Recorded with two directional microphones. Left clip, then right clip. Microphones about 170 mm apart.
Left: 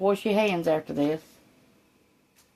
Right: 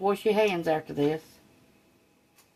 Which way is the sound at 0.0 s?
55° left (ahead or behind).